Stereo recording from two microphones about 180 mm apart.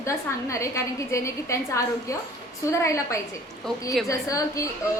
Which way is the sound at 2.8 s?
15° left (ahead or behind).